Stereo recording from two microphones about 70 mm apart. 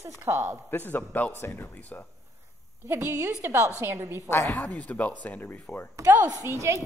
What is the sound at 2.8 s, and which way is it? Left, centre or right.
A woman's voice, right.